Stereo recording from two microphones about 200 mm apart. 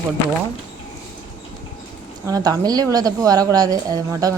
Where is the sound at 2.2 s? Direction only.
15° right (ahead or behind).